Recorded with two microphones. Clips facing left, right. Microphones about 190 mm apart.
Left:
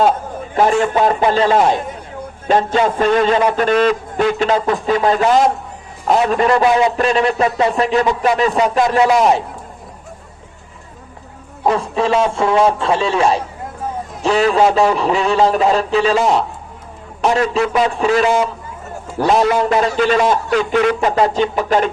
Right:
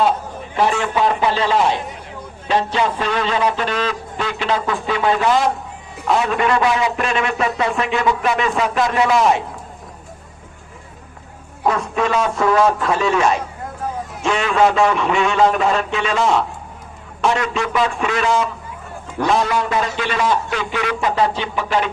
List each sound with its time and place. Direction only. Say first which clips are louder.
0.5 s a man's voice: left 4 dB; 45° left (ahead or behind)
11.7 s a man's voice: left 3 dB; 30° left (ahead or behind)